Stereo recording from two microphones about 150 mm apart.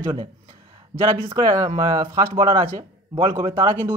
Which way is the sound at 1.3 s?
25° right (ahead or behind).